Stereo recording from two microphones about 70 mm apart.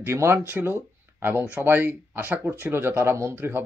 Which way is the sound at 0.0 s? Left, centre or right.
Right.